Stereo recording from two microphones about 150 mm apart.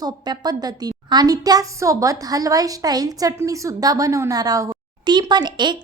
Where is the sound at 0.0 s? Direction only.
25° right (ahead or behind).